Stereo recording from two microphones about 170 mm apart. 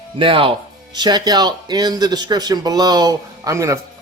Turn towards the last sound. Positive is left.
turn(degrees=-20)  # may be behind; listen again after turning